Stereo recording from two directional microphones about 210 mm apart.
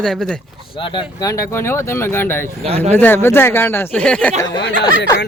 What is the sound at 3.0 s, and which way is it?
Speech, 10° left (ahead or behind).